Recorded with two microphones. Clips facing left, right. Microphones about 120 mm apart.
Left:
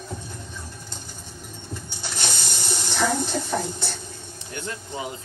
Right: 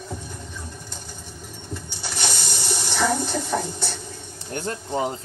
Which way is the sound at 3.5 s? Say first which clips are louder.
Right 1 dB; 15° left (ahead or behind).